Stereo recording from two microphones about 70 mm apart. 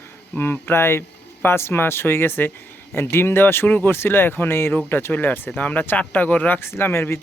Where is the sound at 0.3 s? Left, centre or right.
Left.